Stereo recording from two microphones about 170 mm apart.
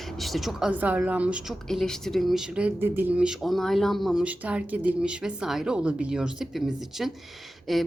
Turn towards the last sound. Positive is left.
turn(degrees=0)  # may be behind; listen again after turning